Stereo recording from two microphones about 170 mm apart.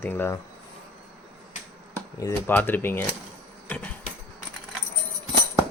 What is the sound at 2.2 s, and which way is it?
Speech, 10° left (ahead or behind).